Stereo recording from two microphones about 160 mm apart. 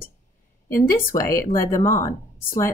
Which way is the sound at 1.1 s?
20° left (ahead or behind).